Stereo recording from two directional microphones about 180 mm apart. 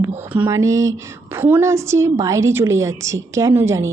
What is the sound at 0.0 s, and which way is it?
Speech, 15° right (ahead or behind).